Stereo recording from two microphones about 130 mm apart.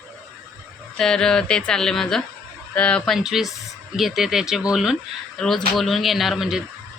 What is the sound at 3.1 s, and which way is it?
Speech, 5° right (ahead or behind).